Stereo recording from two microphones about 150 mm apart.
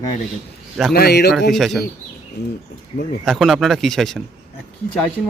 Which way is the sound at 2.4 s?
90° left.